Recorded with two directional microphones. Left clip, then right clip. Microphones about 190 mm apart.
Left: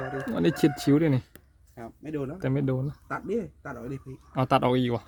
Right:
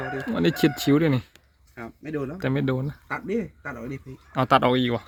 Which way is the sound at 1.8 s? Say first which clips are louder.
Right 3 dB; 30° right (ahead or behind).